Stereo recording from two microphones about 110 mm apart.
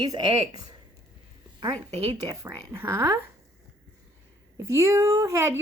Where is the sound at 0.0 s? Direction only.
35° right (ahead or behind).